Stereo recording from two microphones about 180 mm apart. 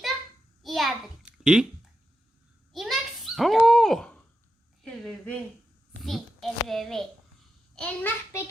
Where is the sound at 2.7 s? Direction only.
Centre (ahead or behind).